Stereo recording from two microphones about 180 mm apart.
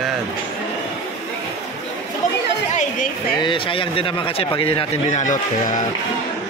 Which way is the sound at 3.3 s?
25° left (ahead or behind).